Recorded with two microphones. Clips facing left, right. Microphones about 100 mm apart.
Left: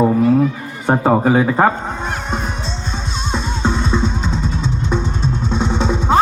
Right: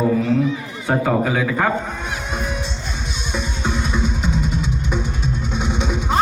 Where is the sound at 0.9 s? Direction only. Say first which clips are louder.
Left 5 dB; 35° left (ahead or behind).